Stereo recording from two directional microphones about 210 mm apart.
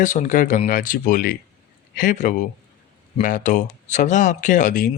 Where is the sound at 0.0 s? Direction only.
35° left (ahead or behind).